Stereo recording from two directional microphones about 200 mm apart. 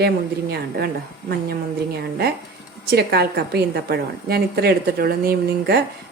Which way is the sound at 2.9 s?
55° right (ahead or behind).